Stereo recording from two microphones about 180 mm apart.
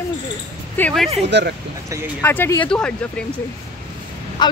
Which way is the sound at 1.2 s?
70° right (ahead or behind).